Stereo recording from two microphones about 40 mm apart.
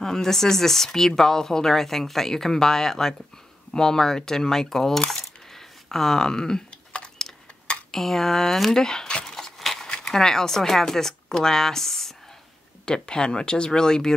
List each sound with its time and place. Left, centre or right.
0.0 s speech: centre
5.1 s coin: centre
6.7 s a sound: left
7.9 s speech: centre
9.2 s a sound: centre
9.8 s speech: centre
12.8 s speech: left